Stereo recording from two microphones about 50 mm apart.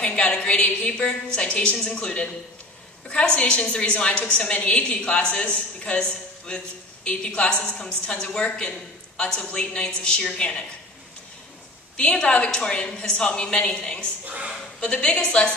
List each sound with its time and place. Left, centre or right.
0.0 s a woman's voice: left
12.0 s a woman's voice: left
14.2 s a woman's voice: right
14.8 s a woman's voice: left